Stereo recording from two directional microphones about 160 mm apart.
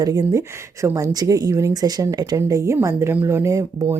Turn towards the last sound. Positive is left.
turn(degrees=-20)  # may be behind; listen again after turning